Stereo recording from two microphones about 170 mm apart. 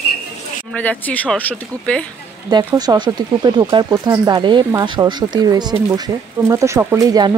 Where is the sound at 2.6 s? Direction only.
20° right (ahead or behind).